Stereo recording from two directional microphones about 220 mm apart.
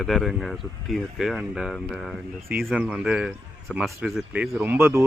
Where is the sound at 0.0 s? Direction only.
Centre (ahead or behind).